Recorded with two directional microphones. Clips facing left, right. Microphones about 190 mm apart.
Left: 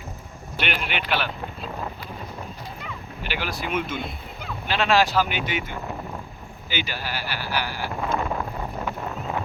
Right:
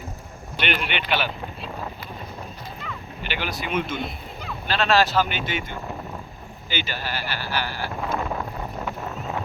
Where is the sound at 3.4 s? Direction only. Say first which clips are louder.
Right 1 dB; centre (ahead or behind).